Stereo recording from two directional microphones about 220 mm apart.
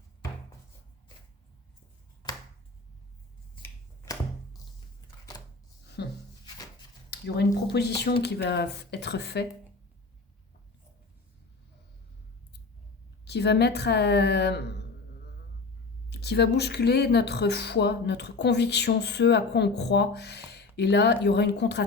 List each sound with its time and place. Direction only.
3.6 s finger snapping: 15° left (ahead or behind)
6.0 s a sound: 50° left (ahead or behind)
7.1 s speech: 50° left (ahead or behind)
13.2 s speech: 50° left (ahead or behind)
16.0 s speech: 50° left (ahead or behind)